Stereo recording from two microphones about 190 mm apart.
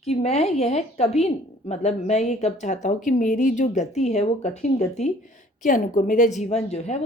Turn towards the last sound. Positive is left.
turn(degrees=35)  # may be behind; listen again after turning